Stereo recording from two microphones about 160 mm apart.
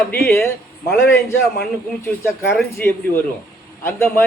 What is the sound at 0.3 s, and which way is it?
Speech, 15° left (ahead or behind).